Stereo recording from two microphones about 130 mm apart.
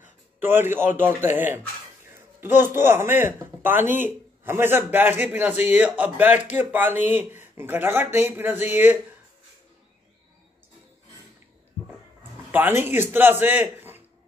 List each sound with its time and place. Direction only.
0.0 s a man's voice: 15° right (ahead or behind)
12.2 s a man's voice: 15° right (ahead or behind)